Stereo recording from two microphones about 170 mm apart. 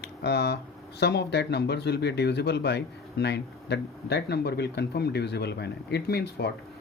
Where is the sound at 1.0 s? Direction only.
75° left (ahead or behind).